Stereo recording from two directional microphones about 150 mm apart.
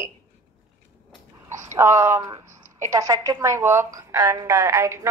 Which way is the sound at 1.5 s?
20° right (ahead or behind).